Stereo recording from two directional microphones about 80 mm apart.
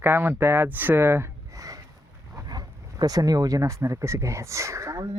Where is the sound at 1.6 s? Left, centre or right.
Right.